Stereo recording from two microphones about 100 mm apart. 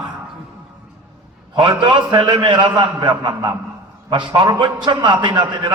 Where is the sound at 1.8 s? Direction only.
50° right (ahead or behind).